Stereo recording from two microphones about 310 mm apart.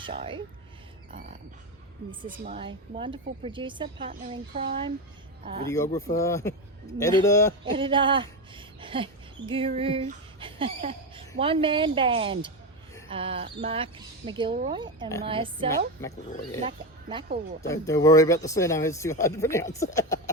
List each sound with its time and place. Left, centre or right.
0.0 s a woman's voice: centre
2.4 s a woman's voice: centre
5.7 s speech: centre
7.6 s a woman's voice: centre
16.0 s speech: centre
16.6 s speech: centre
17.7 s speech: centre